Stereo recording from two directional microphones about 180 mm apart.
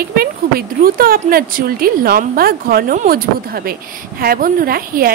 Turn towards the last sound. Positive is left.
turn(degrees=-55)  # may be behind; listen again after turning